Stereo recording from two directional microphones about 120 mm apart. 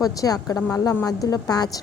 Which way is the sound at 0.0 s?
30° left (ahead or behind).